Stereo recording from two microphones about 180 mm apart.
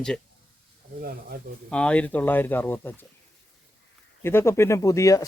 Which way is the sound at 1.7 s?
5° left (ahead or behind).